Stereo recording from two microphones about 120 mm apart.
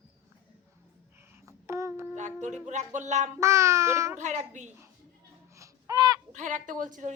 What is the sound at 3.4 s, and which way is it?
Speech, 25° right (ahead or behind).